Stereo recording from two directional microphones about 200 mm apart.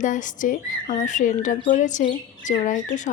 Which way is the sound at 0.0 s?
40° left (ahead or behind).